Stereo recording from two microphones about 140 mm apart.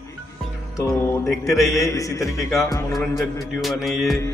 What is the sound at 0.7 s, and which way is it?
A man's voice, 20° left (ahead or behind).